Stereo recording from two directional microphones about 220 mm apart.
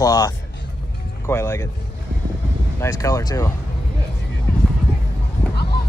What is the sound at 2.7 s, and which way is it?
Speech, 15° left (ahead or behind).